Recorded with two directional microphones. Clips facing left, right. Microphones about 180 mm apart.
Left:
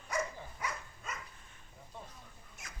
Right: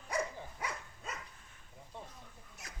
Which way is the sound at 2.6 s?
35° right (ahead or behind).